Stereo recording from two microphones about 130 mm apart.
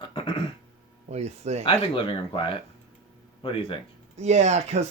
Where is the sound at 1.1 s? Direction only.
55° right (ahead or behind).